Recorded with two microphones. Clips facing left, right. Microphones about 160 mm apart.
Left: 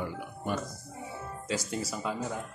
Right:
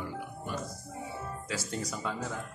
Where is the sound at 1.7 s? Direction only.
5° left (ahead or behind).